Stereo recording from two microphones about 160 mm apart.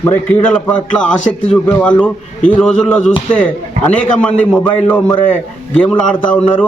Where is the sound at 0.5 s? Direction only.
5° left (ahead or behind).